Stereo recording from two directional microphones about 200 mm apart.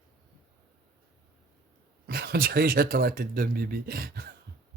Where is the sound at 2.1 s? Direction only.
50° right (ahead or behind).